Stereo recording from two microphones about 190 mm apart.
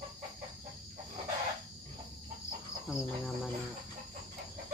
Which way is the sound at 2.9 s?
Centre (ahead or behind).